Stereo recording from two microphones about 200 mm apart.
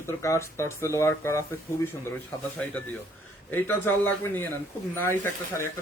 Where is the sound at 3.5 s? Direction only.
10° left (ahead or behind).